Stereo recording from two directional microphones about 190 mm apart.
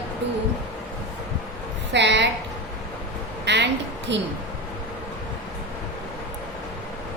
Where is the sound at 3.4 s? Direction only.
65° right (ahead or behind).